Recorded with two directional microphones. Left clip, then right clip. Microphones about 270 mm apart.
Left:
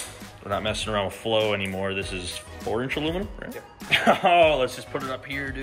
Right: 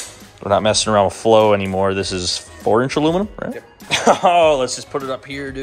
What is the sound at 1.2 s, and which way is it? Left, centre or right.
Speech, right.